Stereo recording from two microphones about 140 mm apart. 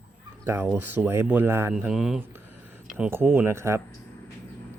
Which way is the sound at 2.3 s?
15° right (ahead or behind).